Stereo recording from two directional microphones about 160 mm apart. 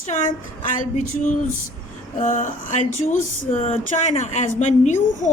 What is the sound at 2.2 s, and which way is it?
A child's voice, 55° left (ahead or behind).